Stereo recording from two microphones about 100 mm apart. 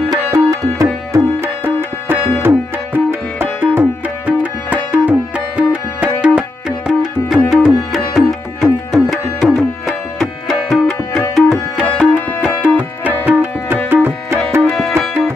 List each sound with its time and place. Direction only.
0.1 s tabla: 35° right (ahead or behind)
1.1 s tabla: 25° right (ahead or behind)